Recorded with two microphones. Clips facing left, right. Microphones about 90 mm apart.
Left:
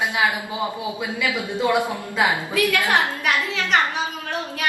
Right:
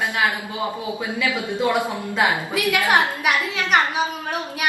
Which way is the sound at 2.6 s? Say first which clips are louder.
Right 1 dB; 15° right (ahead or behind).